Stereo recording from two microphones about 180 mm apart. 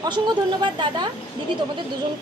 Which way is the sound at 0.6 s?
25° right (ahead or behind).